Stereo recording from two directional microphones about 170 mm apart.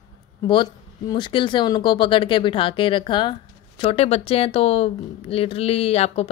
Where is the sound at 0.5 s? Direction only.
25° left (ahead or behind).